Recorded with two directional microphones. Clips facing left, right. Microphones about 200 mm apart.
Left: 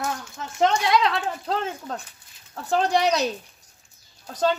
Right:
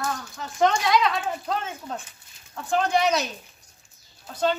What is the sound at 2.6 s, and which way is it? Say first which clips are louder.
Speech: left 1 dB; 35° left (ahead or behind).